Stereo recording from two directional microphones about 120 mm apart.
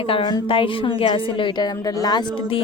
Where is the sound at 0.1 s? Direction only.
40° left (ahead or behind).